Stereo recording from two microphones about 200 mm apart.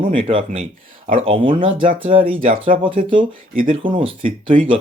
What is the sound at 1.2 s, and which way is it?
Speech, 25° right (ahead or behind).